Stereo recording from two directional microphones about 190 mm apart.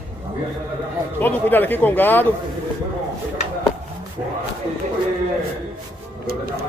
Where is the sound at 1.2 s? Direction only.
10° left (ahead or behind).